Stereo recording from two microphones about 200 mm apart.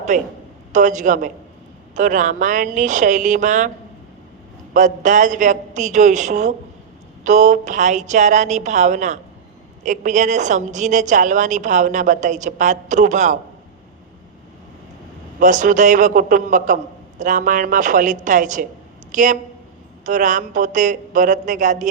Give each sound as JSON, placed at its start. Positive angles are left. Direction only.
{"t": 0.1, "sound": "a woman's voice", "side_deg": -40}
{"t": 4.7, "sound": "a woman's voice", "side_deg": -40}
{"t": 15.4, "sound": "a woman's voice", "side_deg": -40}